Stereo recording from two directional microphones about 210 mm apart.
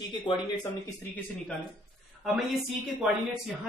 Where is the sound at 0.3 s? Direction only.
25° left (ahead or behind).